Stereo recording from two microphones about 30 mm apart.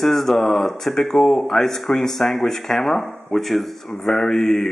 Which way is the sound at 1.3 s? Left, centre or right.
Left.